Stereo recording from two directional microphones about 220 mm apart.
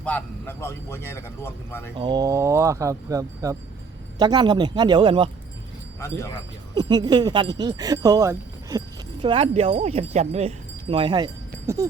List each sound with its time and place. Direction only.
0.0 s a man's voice: 10° left (ahead or behind)
2.0 s speech: 20° right (ahead or behind)
6.0 s a man's voice: 15° left (ahead or behind)
6.7 s speech: 20° right (ahead or behind)
9.2 s speech: 25° right (ahead or behind)